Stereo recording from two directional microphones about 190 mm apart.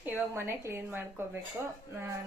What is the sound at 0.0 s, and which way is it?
A woman's voice, 10° right (ahead or behind).